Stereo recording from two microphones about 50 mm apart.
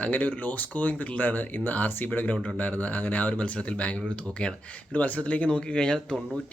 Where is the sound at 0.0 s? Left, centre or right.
Left; by 6.1 s centre.